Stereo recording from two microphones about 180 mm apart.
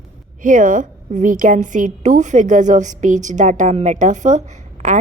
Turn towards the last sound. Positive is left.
turn(degrees=-45)  # may be behind; listen again after turning